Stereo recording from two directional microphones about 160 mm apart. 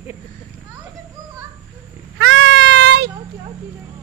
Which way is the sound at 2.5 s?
90° right.